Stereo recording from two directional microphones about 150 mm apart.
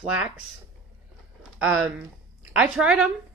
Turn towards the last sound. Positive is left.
turn(degrees=-5)  # may be behind; listen again after turning